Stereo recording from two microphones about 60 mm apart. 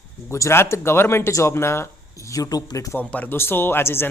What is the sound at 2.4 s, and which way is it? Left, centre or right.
Speech, left.